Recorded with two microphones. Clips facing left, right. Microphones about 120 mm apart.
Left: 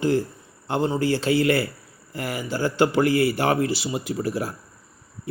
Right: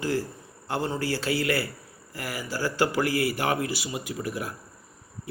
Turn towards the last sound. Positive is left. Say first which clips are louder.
# left 6 dB
turn(degrees=30)  # may be behind; listen again after turning